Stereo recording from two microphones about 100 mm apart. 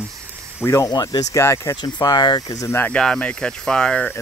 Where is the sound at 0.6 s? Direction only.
30° left (ahead or behind).